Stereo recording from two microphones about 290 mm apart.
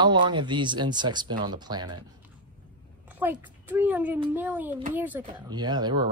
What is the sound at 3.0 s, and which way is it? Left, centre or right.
Speech, centre.